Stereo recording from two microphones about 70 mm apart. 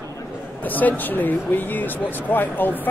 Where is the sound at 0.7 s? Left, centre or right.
Left.